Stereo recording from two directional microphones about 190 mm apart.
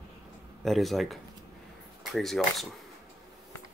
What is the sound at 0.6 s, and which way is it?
Speech, centre (ahead or behind).